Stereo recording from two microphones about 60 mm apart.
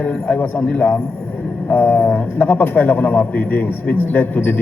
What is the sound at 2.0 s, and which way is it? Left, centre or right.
A man's voice, left.